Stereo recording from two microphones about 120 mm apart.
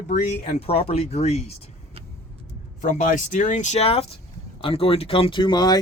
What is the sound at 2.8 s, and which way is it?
Speech, 85° left.